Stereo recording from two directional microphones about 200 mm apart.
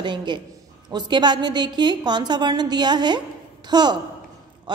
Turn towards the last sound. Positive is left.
turn(degrees=-20)  # may be behind; listen again after turning